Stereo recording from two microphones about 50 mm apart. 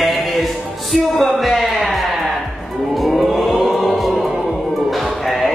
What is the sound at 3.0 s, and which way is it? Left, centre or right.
Chant, centre.